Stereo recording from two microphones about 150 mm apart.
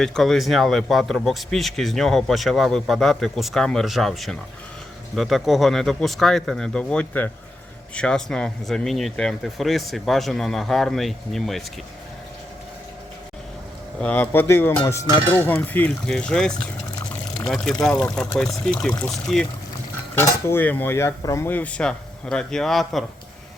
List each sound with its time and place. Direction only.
0.0 s speech: 5° left (ahead or behind)
14.0 s speech: 10° left (ahead or behind)
20.1 s speech: 15° left (ahead or behind); by 23.0 s centre (ahead or behind)